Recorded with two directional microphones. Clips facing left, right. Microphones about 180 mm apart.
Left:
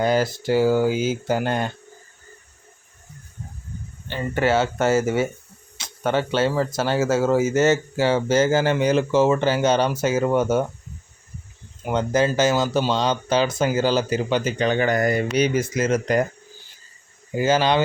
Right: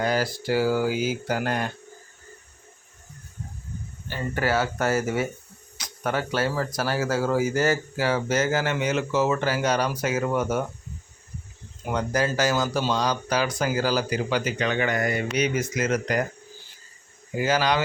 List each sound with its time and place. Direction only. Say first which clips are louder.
0.0 s speech: left 4 dB; 25° left (ahead or behind)
4.1 s speech: left 4 dB; 25° left (ahead or behind)
11.9 s speech: left 5 dB; 25° left (ahead or behind)
17.3 s speech: left 4 dB; 25° left (ahead or behind)